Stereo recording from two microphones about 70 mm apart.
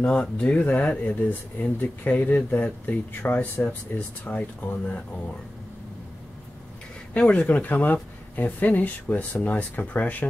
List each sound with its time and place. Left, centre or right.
0.0 s speech: centre
7.2 s speech: centre